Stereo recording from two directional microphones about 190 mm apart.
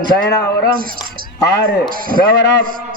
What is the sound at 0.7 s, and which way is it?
A man's voice, 50° right (ahead or behind).